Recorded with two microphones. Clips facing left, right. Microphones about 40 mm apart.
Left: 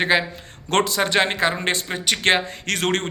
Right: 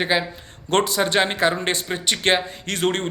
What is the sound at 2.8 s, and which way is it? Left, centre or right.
Speech, left.